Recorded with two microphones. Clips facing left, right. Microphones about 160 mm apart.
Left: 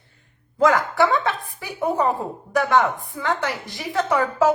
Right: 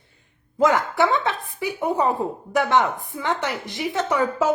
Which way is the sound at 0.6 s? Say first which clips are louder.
Left 1 dB; 20° right (ahead or behind).